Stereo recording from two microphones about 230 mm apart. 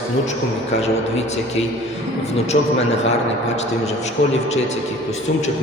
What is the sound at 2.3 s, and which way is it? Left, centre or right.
Speech, left.